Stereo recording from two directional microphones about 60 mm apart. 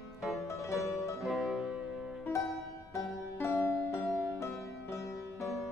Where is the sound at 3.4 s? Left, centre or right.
Left.